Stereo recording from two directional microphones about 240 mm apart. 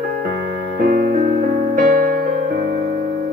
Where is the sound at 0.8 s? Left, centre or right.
Right.